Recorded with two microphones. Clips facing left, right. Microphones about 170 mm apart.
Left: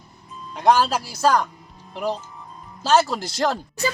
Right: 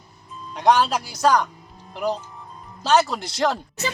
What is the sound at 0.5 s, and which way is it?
Speech, centre (ahead or behind).